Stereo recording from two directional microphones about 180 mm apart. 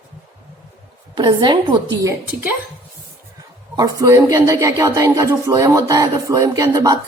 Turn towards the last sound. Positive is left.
turn(degrees=-20)  # may be behind; listen again after turning